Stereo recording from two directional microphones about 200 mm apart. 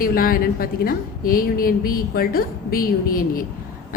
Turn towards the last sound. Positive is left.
turn(degrees=45)  # may be behind; listen again after turning